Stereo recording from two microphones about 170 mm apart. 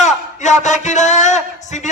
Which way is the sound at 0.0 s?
45° left (ahead or behind).